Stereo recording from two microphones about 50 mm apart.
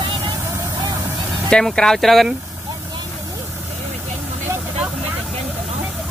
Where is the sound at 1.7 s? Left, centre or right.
Centre.